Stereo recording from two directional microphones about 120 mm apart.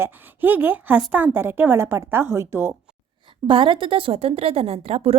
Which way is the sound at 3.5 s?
45° right (ahead or behind).